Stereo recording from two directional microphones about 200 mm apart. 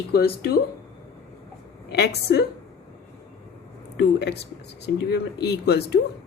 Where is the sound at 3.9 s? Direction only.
55° left (ahead or behind).